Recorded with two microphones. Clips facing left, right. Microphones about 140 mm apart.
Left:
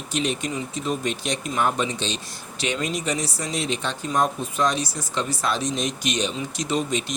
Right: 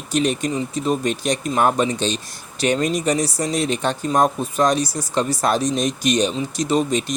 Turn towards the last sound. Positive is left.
turn(degrees=-40)  # may be behind; listen again after turning